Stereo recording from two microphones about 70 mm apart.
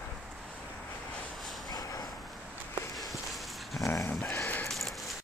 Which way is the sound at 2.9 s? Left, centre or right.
Centre.